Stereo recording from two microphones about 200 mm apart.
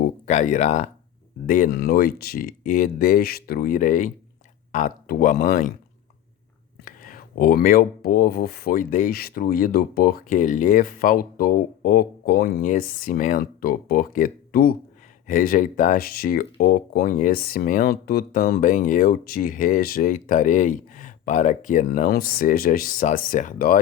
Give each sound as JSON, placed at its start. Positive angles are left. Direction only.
{"t": 0.3, "sound": "speech", "side_deg": 35}
{"t": 6.8, "sound": "speech", "side_deg": 45}